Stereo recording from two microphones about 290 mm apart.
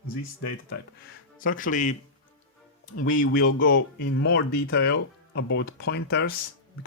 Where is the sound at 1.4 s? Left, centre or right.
Left.